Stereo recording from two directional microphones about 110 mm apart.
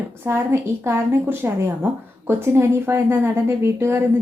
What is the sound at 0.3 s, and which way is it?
Speech, 20° right (ahead or behind).